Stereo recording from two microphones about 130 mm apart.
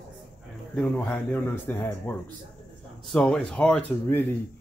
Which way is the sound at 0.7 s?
15° left (ahead or behind).